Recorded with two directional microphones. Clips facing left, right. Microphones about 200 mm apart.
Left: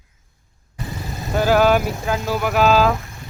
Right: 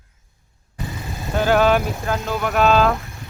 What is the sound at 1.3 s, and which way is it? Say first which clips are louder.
Speech: left 1 dB; 5° left (ahead or behind).